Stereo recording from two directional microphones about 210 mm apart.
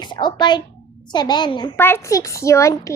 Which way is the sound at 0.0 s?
20° left (ahead or behind).